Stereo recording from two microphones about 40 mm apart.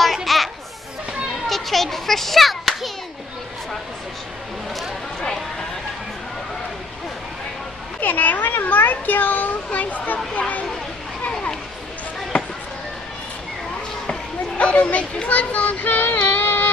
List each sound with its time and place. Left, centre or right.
0.0 s children playing: centre
1.5 s children playing: centre
5.2 s a sound: centre
8.0 s a sound: left
9.7 s speech: left
14.6 s speech: left
16.3 s music: left